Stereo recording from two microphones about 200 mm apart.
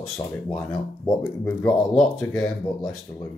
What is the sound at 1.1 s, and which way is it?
Speech, 15° left (ahead or behind).